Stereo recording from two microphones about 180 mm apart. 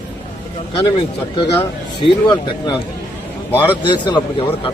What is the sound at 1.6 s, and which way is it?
Speech, 25° left (ahead or behind).